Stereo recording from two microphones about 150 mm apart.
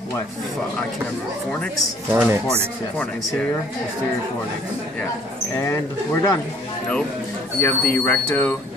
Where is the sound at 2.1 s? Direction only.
10° right (ahead or behind).